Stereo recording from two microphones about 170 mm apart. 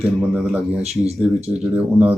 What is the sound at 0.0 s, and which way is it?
Speech, 5° right (ahead or behind).